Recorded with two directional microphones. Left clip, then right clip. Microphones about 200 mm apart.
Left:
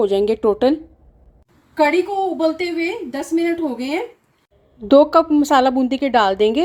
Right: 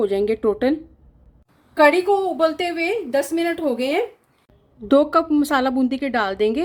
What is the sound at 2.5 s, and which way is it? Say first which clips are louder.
A woman's voice: even; 50° right (ahead or behind).